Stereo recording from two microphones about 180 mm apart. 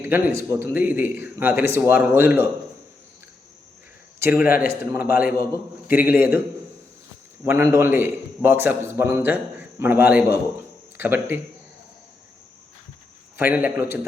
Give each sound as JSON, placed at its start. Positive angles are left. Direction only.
{"t": 0.0, "sound": "a man's voice", "side_deg": -15}
{"t": 4.2, "sound": "speech", "side_deg": -10}
{"t": 4.4, "sound": "a man's voice", "side_deg": 55}
{"t": 4.7, "sound": "a man's voice", "side_deg": -15}
{"t": 5.0, "sound": "a man's voice", "side_deg": 55}
{"t": 5.9, "sound": "a man's voice", "side_deg": -10}
{"t": 7.4, "sound": "a man's voice", "side_deg": -15}
{"t": 13.4, "sound": "a man's voice", "side_deg": -10}